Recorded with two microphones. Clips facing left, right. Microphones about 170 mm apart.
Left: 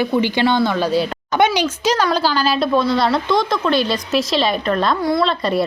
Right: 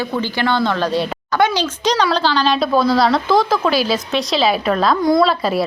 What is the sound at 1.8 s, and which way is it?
A woman's voice, 5° left (ahead or behind).